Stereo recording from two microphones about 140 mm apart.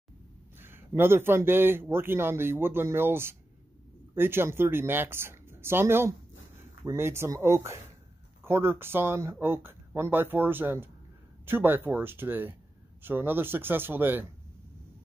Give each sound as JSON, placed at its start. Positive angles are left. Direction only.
{"t": 0.6, "sound": "speech", "side_deg": -15}